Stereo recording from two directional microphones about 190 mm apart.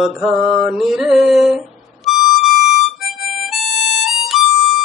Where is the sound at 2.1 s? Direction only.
Centre (ahead or behind).